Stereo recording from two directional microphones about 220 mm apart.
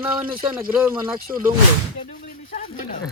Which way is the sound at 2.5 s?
40° left (ahead or behind).